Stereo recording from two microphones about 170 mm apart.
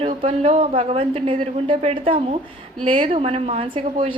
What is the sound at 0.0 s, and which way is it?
Speech, 30° right (ahead or behind).